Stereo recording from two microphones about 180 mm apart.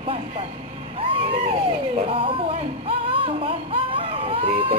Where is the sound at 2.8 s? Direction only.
30° right (ahead or behind).